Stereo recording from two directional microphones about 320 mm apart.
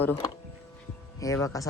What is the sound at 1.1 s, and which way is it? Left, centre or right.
Speech, centre.